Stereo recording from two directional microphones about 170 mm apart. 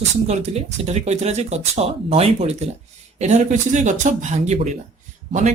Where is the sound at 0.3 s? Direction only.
40° right (ahead or behind).